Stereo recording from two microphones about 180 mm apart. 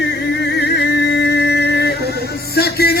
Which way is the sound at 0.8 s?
75° left (ahead or behind).